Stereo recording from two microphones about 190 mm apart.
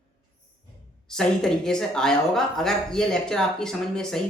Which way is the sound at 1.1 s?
5° left (ahead or behind).